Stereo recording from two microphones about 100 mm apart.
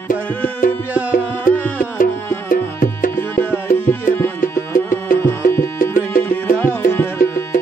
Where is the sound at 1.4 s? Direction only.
20° left (ahead or behind).